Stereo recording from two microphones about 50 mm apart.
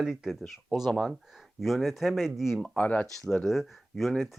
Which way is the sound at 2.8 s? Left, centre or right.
Left.